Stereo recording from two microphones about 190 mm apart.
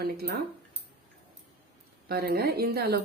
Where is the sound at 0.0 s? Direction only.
55° right (ahead or behind).